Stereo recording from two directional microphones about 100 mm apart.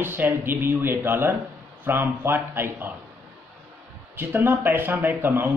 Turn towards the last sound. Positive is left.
turn(degrees=-20)  # may be behind; listen again after turning